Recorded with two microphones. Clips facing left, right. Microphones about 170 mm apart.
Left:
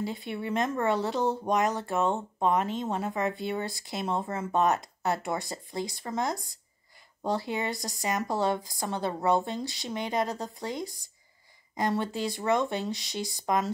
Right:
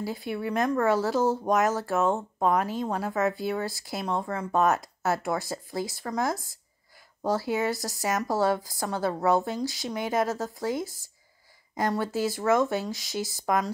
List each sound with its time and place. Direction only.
0.0 s speech: centre (ahead or behind)
8.4 s a woman's voice: 20° left (ahead or behind)
9.0 s speech: centre (ahead or behind)